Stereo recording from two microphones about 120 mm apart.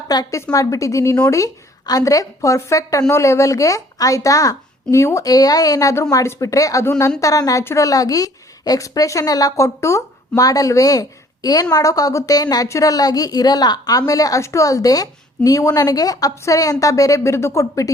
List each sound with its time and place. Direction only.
0.1 s a woman's voice: 30° left (ahead or behind)